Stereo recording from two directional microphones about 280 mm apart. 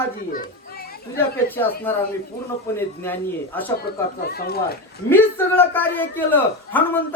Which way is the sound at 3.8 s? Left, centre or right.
Left.